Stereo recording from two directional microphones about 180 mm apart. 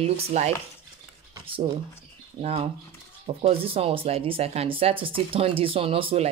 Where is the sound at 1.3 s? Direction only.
30° right (ahead or behind).